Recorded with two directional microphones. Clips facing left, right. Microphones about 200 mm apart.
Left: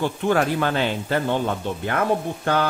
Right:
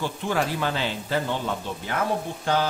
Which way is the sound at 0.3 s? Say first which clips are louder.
Left 5 dB; 55° left (ahead or behind).